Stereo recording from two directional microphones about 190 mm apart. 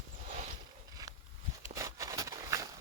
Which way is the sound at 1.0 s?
20° right (ahead or behind).